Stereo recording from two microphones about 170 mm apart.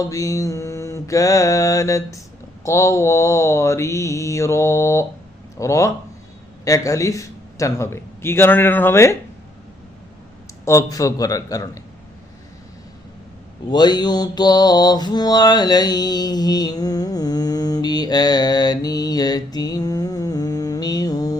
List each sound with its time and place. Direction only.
0.0 s mantra: 20° left (ahead or behind)
2.6 s a man's voice: 20° left (ahead or behind)
5.5 s mantra: 20° left (ahead or behind)
6.7 s a man's voice: 20° left (ahead or behind)
10.7 s mantra: 20° left (ahead or behind)
13.7 s mantra: 25° left (ahead or behind)